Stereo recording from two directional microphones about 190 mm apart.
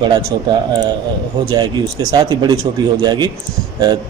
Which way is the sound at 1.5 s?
20° right (ahead or behind).